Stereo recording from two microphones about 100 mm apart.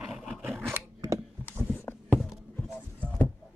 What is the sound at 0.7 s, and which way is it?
Scissors, 30° right (ahead or behind).